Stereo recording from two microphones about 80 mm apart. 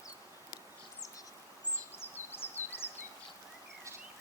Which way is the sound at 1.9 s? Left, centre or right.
Left.